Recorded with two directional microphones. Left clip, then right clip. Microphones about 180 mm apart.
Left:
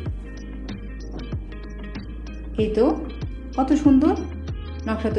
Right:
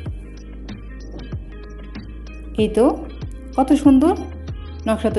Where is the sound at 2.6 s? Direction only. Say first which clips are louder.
Right 4 dB; 55° right (ahead or behind).